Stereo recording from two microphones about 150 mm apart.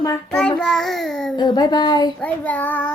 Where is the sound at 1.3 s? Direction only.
30° left (ahead or behind).